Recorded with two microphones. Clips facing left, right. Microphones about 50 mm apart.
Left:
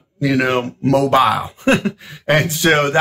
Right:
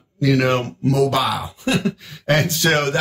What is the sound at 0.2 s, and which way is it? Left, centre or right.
Speech, centre.